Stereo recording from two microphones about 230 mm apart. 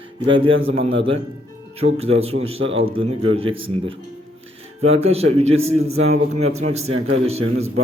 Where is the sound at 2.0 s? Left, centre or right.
Right.